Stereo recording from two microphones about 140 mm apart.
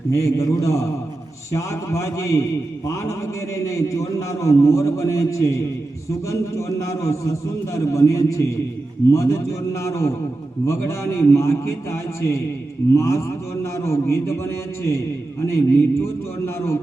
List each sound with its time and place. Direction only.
0.1 s a man's voice: 20° left (ahead or behind)